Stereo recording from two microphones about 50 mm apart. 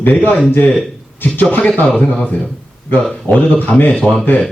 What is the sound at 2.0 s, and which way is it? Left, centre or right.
Speech, left.